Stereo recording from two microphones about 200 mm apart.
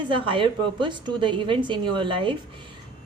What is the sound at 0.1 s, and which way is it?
A woman's voice, 25° right (ahead or behind).